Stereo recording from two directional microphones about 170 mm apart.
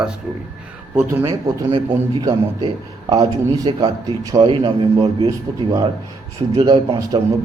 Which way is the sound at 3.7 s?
30° right (ahead or behind).